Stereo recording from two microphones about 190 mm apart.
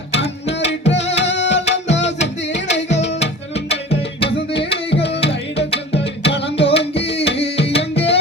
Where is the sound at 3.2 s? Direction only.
65° left (ahead or behind).